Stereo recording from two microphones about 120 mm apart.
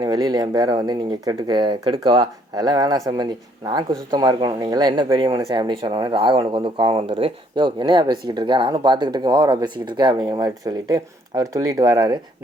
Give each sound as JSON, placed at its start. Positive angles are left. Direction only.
{"t": 0.0, "sound": "speech", "side_deg": -35}